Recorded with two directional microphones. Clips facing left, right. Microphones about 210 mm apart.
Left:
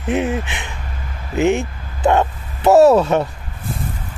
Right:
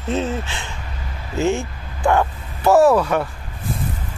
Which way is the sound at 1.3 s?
20° left (ahead or behind).